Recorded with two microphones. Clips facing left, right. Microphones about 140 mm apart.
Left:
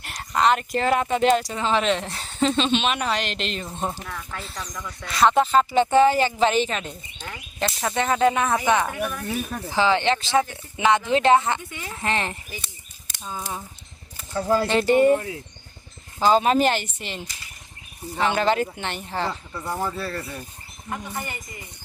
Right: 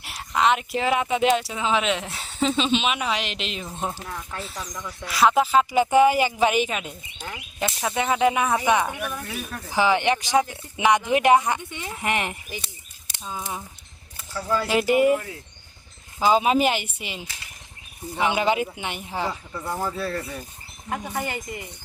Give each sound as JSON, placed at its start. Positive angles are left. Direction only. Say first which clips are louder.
{"t": 0.0, "sound": "speech", "louder": "left 1 dB", "side_deg": 0}
{"t": 4.0, "sound": "speech", "louder": "even", "side_deg": -20}
{"t": 4.4, "sound": "speech", "louder": "even", "side_deg": -10}
{"t": 9.2, "sound": "speech", "louder": "left 5 dB", "side_deg": 35}
{"t": 9.7, "sound": "speech", "louder": "even", "side_deg": -15}
{"t": 13.2, "sound": "speech", "louder": "even", "side_deg": 0}
{"t": 14.3, "sound": "speech", "louder": "left 4 dB", "side_deg": 40}
{"t": 14.7, "sound": "speech", "louder": "even", "side_deg": -10}
{"t": 16.2, "sound": "speech", "louder": "left 1 dB", "side_deg": -5}
{"t": 20.9, "sound": "speech", "louder": "right 3 dB", "side_deg": -80}